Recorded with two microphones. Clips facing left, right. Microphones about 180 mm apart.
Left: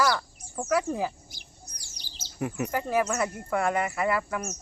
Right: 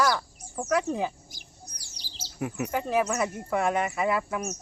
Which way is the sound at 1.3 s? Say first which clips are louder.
Right 2 dB; 40° right (ahead or behind).